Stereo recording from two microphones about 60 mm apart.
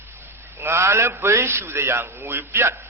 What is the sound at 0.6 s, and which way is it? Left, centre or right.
A man's voice, right.